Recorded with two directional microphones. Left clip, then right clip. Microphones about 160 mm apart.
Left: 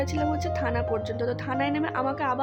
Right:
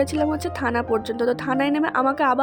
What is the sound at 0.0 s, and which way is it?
A woman's voice, 40° right (ahead or behind).